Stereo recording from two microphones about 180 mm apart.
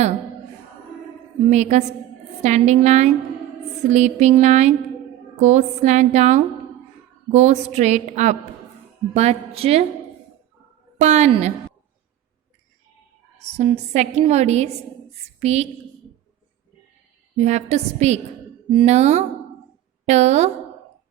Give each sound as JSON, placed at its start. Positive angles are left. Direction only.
{"t": 1.5, "sound": "a woman's voice", "side_deg": -40}
{"t": 10.9, "sound": "a woman's voice", "side_deg": -40}
{"t": 13.4, "sound": "a woman's voice", "side_deg": -40}
{"t": 17.3, "sound": "a woman's voice", "side_deg": -40}